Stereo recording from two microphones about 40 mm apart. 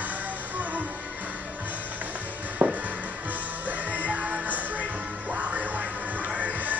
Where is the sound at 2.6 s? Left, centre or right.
Right.